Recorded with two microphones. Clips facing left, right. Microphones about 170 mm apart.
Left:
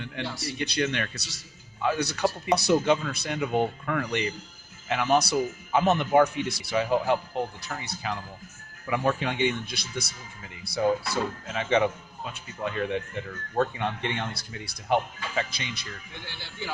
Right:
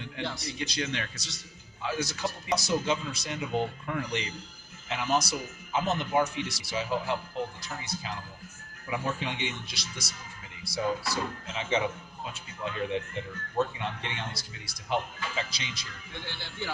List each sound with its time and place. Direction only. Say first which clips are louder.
0.2 s a man's voice: left 2 dB; 70° left (ahead or behind)